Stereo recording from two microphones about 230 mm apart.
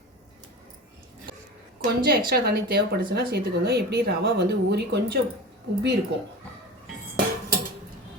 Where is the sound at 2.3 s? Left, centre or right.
Right.